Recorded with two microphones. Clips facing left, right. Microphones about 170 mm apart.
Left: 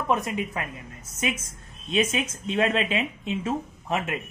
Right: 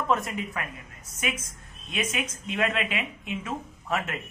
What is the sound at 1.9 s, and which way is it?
Speech, 25° left (ahead or behind).